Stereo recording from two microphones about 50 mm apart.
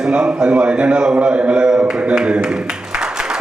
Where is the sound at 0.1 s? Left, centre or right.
Centre.